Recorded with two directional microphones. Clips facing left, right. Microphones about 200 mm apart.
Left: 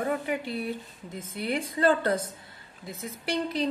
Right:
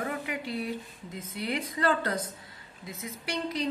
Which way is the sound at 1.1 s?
50° left (ahead or behind).